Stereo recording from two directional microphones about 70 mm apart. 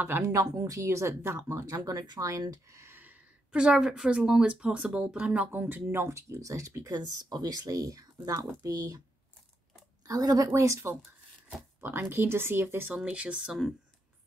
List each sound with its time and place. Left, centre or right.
0.2 s speech: right
1.7 s speech: right
2.8 s a woman's voice: right
5.5 s speech: right
7.0 s speech: right
7.6 s speech: right
10.0 s speech: right
11.8 s speech: right
12.9 s speech: centre
13.5 s speech: centre